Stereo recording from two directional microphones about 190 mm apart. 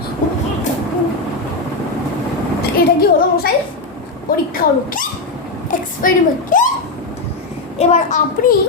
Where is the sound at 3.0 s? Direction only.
55° left (ahead or behind).